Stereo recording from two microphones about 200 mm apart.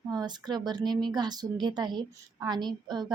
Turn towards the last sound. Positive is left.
turn(degrees=-20)  # may be behind; listen again after turning